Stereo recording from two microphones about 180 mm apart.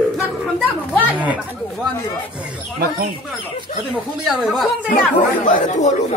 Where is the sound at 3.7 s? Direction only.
45° left (ahead or behind).